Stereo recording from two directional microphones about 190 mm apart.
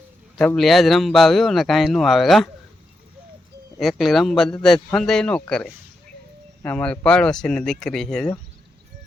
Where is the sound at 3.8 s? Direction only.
Centre (ahead or behind).